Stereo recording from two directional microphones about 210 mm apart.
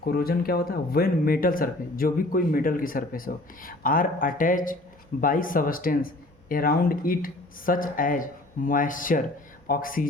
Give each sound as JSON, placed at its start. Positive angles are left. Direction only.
{"t": 0.0, "sound": "speech", "side_deg": 45}